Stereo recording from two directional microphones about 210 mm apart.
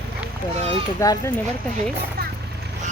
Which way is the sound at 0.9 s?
15° left (ahead or behind).